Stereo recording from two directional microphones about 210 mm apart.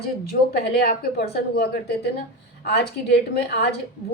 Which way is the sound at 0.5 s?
50° left (ahead or behind).